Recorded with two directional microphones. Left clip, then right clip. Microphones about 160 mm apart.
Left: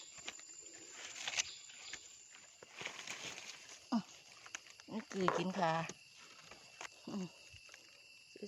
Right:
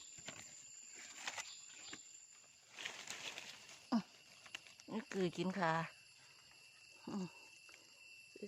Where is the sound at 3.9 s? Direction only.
15° right (ahead or behind).